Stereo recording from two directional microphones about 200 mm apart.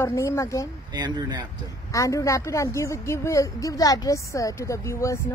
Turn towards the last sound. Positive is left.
turn(degrees=15)  # may be behind; listen again after turning